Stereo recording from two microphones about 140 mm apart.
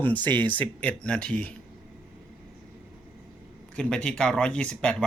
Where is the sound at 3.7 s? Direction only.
5° left (ahead or behind).